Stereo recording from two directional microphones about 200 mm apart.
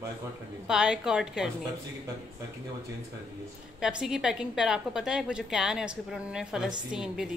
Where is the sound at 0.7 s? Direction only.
5° right (ahead or behind).